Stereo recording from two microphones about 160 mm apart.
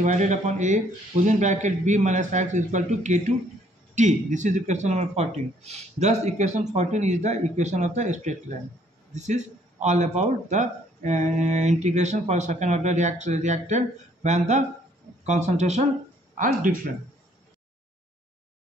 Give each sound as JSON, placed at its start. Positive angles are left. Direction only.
{"t": 0.0, "sound": "a man's voice", "side_deg": -50}
{"t": 16.3, "sound": "speech", "side_deg": -60}